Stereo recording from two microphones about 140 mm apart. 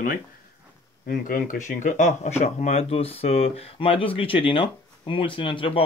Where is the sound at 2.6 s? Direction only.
50° left (ahead or behind).